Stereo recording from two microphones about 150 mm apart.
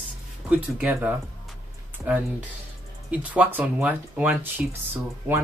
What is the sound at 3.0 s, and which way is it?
Speech, 10° right (ahead or behind).